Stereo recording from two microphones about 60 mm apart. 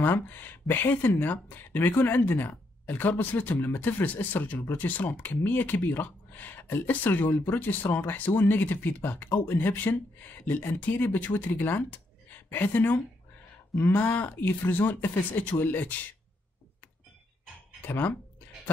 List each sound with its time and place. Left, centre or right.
0.0 s speech: left
17.8 s speech: left